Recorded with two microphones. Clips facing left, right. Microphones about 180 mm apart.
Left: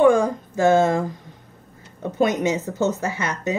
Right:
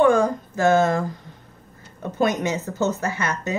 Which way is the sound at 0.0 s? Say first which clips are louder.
Left 1 dB; 15° left (ahead or behind).